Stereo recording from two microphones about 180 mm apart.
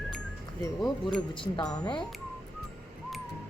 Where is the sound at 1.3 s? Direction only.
25° left (ahead or behind).